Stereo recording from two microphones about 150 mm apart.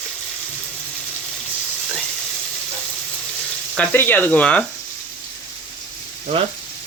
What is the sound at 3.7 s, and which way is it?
Speech, 10° left (ahead or behind).